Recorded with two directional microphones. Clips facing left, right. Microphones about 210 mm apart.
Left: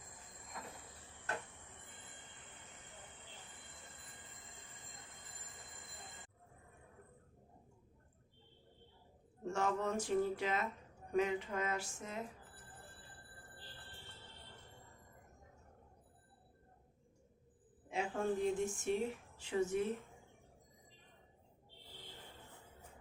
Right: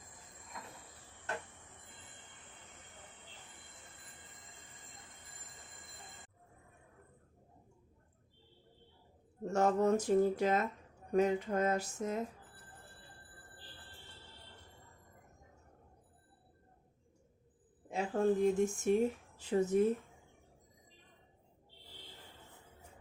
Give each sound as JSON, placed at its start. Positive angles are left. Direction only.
{"t": 9.5, "sound": "speech", "side_deg": -40}
{"t": 11.1, "sound": "a sound", "side_deg": -40}
{"t": 17.9, "sound": "speech", "side_deg": -40}